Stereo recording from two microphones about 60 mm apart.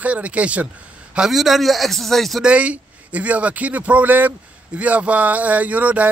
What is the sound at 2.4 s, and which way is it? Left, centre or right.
A man's voice, right.